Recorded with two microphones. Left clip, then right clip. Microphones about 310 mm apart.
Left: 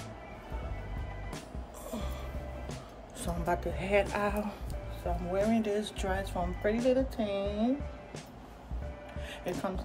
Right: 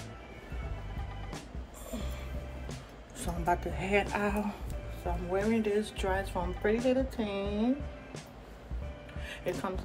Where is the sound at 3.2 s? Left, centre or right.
Centre.